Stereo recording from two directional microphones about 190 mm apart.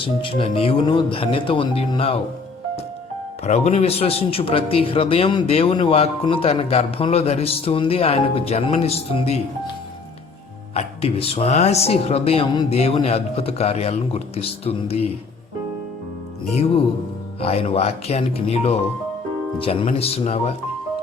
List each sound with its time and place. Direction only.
0.0 s speech: 25° left (ahead or behind)
3.4 s a man's voice: 35° left (ahead or behind)
10.8 s a man's voice: 30° left (ahead or behind)
17.4 s a man's voice: 30° left (ahead or behind)